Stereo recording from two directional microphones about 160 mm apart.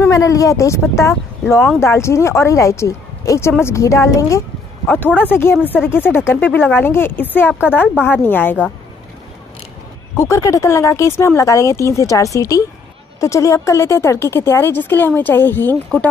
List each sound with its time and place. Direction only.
0.1 s a woman's voice: 20° left (ahead or behind)
10.1 s a woman's voice: 20° left (ahead or behind)